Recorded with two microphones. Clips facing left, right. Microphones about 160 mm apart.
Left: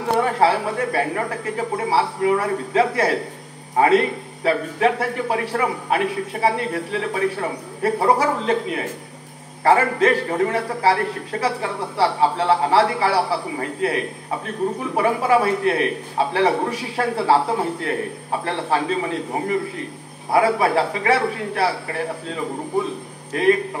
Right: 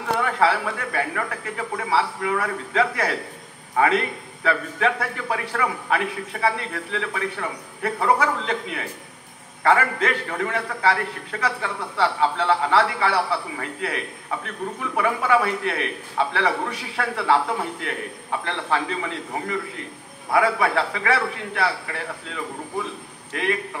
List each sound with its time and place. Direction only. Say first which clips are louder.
0.2 s a man's voice: left 2 dB; 30° left (ahead or behind)